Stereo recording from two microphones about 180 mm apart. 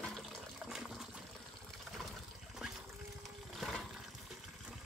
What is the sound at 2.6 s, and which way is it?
Trickle, 5° right (ahead or behind).